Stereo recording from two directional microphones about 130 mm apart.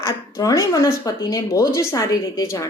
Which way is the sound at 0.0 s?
25° left (ahead or behind).